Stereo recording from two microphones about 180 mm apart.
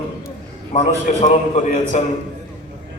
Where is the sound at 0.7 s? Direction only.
40° left (ahead or behind).